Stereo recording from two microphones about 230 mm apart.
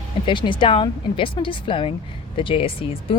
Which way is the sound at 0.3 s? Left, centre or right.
Left.